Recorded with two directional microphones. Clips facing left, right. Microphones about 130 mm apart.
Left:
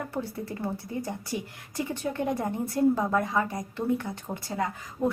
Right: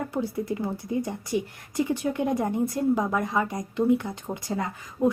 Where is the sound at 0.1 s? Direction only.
15° right (ahead or behind).